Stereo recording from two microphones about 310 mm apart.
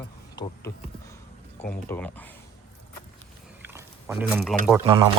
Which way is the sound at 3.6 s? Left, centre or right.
Centre.